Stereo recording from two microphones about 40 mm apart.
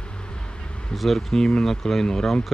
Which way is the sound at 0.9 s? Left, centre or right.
Centre.